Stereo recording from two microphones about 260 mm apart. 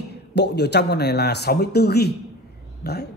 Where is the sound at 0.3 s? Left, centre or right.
Left.